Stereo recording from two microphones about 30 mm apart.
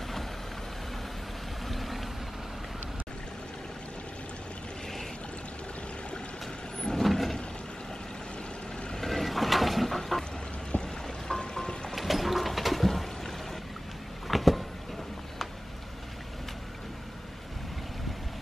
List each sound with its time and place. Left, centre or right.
1.7 s vehicle: centre
7.0 s vehicle: centre
9.0 s vehicle: centre
10.8 s boat: left
11.9 s a sound: centre
14.2 s vehicle: centre